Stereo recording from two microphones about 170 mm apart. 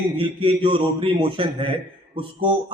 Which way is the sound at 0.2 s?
30° right (ahead or behind).